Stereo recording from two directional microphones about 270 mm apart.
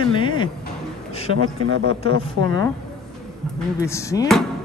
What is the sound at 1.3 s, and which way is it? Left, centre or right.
Speech, right.